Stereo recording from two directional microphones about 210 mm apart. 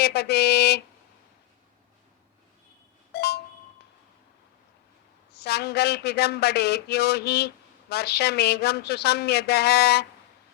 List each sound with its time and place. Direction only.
0.0 s speech: 50° left (ahead or behind)
3.1 s a sound: 50° left (ahead or behind)
5.4 s speech: 50° left (ahead or behind)